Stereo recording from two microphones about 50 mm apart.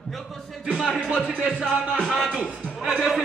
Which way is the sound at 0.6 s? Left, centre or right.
Centre.